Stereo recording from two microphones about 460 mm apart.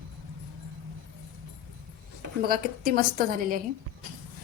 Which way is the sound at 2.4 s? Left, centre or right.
Centre.